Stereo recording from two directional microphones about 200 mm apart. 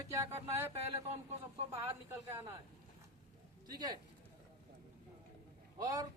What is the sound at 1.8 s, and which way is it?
Speech, 15° right (ahead or behind).